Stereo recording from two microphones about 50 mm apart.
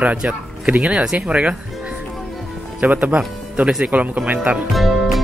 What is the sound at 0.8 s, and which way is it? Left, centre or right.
Speech, centre.